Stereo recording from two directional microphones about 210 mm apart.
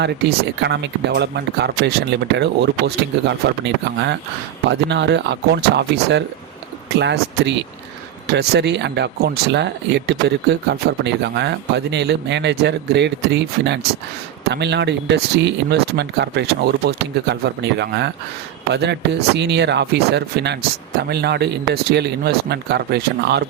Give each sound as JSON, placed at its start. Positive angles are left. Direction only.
{"t": 0.0, "sound": "speech", "side_deg": -55}